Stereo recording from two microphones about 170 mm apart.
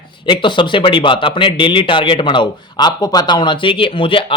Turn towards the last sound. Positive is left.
turn(degrees=30)  # may be behind; listen again after turning